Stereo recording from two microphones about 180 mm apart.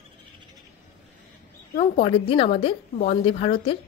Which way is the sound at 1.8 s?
35° left (ahead or behind).